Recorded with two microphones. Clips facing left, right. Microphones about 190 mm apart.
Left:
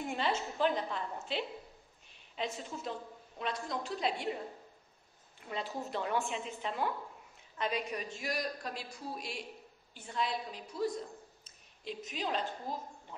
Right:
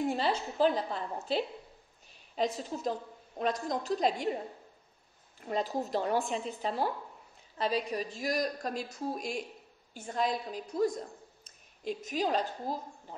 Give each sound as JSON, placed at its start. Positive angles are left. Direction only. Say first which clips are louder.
{"t": 0.0, "sound": "a woman's voice", "louder": "right 4 dB", "side_deg": -35}
{"t": 5.5, "sound": "a woman's voice", "louder": "right 7 dB", "side_deg": -40}